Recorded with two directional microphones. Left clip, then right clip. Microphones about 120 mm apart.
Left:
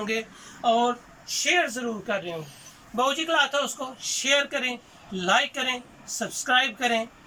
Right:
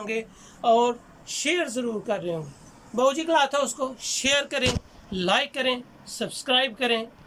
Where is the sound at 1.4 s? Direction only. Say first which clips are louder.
Left 2 dB; 35° right (ahead or behind).